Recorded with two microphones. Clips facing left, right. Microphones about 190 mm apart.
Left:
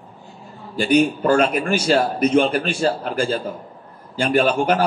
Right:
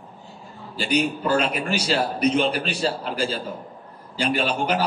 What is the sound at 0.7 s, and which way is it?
A man's voice, 50° left (ahead or behind).